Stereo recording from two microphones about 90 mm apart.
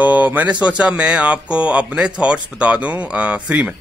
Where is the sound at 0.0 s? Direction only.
20° right (ahead or behind).